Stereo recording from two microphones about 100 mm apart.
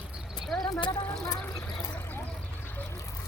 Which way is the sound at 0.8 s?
40° left (ahead or behind).